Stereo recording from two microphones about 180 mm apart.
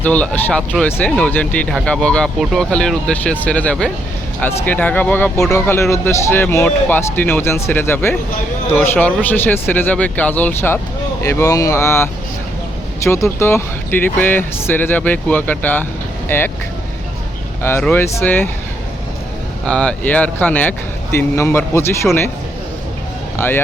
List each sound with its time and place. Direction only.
0.0 s speech: 10° left (ahead or behind)
13.1 s speech: 15° left (ahead or behind)
17.6 s speech: 15° left (ahead or behind)
19.6 s speech: 5° left (ahead or behind)
23.4 s speech: 10° left (ahead or behind)